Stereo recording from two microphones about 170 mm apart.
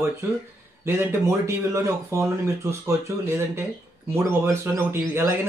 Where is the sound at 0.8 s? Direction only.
15° right (ahead or behind).